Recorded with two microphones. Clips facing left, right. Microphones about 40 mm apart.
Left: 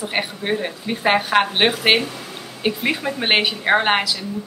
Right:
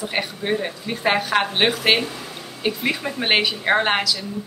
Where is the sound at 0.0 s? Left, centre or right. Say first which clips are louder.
Left 1 dB; centre.